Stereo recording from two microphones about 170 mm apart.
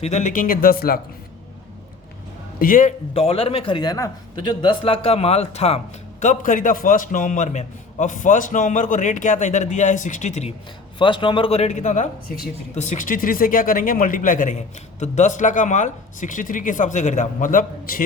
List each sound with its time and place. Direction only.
0.0 s speech: 45° left (ahead or behind); by 0.9 s 60° left (ahead or behind)
2.6 s a man's voice: 55° left (ahead or behind)
3.1 s a man's voice: 35° left (ahead or behind)
10.9 s a man's voice: 30° left (ahead or behind); by 18.0 s 55° left (ahead or behind)